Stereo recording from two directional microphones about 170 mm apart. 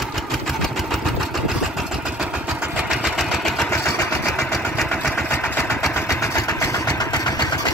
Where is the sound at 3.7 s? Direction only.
15° left (ahead or behind).